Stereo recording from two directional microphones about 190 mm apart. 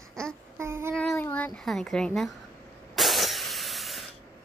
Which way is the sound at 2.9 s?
Centre (ahead or behind).